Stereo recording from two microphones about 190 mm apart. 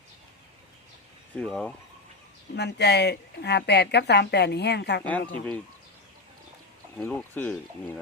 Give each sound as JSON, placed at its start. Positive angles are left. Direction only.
{"t": 1.4, "sound": "speech", "side_deg": 0}
{"t": 2.6, "sound": "a woman's voice", "side_deg": 60}
{"t": 6.9, "sound": "speech", "side_deg": 10}